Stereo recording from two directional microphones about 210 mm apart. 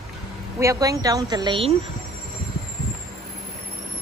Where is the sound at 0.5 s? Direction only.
15° right (ahead or behind).